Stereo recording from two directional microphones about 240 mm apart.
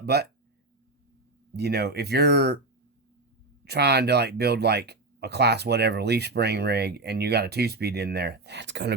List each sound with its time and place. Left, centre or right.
0.0 s speech: right
1.5 s speech: right
3.6 s speech: right